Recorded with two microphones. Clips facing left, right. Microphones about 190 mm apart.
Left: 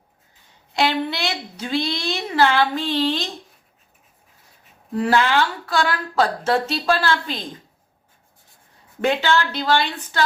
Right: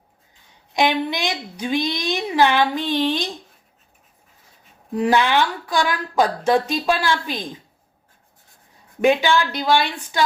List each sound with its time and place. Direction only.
0.7 s a woman's voice: 15° right (ahead or behind)
4.9 s a woman's voice: 15° right (ahead or behind)
9.0 s a woman's voice: 15° right (ahead or behind)